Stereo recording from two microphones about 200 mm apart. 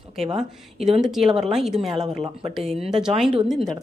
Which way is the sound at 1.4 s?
Centre (ahead or behind).